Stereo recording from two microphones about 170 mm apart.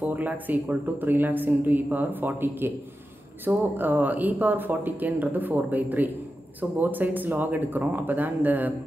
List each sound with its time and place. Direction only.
0.0 s speech: 10° right (ahead or behind)